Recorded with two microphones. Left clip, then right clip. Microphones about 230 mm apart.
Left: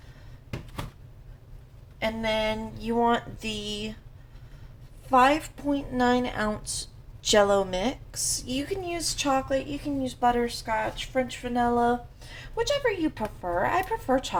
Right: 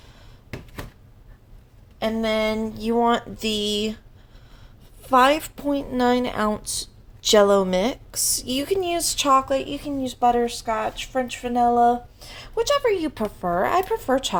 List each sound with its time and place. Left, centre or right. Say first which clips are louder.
2.0 s a woman's voice: right 4 dB; right
5.0 s a woman's voice: right 4 dB; right